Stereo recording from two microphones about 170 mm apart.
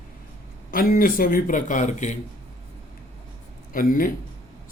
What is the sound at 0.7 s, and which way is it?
A man's voice, 55° left (ahead or behind).